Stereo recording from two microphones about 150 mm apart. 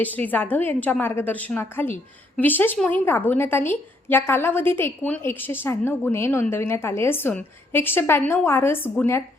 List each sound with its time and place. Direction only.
0.0 s a woman's voice: 10° left (ahead or behind)